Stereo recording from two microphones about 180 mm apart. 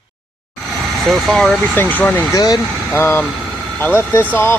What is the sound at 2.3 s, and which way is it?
Speech, 20° left (ahead or behind).